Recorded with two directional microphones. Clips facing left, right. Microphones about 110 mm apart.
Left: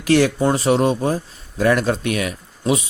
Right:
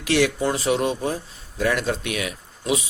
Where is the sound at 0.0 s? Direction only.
45° left (ahead or behind).